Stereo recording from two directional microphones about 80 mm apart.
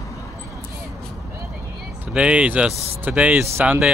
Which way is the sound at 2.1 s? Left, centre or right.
Centre.